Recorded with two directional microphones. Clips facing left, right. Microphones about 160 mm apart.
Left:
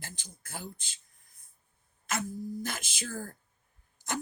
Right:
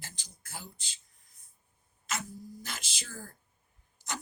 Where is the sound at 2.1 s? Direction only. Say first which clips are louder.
Left 5 dB; 50° left (ahead or behind).